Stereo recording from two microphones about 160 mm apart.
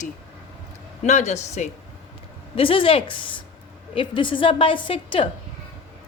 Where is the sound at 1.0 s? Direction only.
45° left (ahead or behind).